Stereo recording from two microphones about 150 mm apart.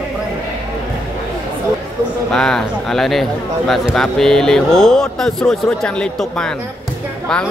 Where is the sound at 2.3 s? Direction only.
5° left (ahead or behind).